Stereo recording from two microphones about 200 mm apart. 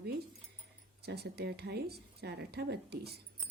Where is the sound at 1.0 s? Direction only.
55° right (ahead or behind).